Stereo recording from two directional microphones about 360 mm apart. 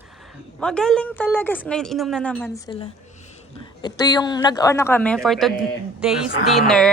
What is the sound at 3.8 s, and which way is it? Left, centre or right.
A woman's voice, centre.